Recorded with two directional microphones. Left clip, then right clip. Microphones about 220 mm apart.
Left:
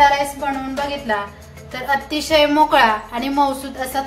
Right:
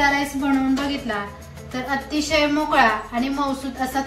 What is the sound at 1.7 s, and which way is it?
A woman's voice, 50° left (ahead or behind).